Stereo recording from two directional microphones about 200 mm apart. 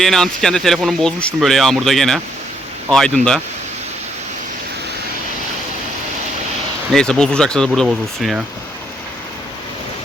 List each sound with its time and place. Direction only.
0.0 s speech: centre (ahead or behind)
3.2 s speech: 35° right (ahead or behind)
6.9 s speech: 5° left (ahead or behind)